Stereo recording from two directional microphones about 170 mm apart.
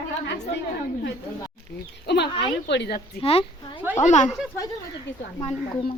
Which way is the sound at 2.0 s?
80° left.